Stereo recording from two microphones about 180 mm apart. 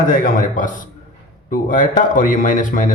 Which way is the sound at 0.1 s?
50° left (ahead or behind).